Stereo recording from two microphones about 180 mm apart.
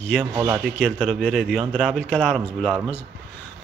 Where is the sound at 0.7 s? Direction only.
5° left (ahead or behind).